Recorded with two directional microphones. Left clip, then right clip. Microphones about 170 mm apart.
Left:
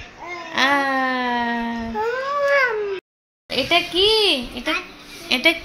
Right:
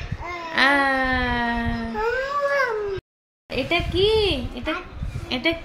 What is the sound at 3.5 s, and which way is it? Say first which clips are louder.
A child's voice: left 4 dB; 15° left (ahead or behind).